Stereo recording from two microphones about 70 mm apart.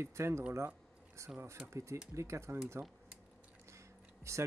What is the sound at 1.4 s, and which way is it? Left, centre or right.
Speech, right.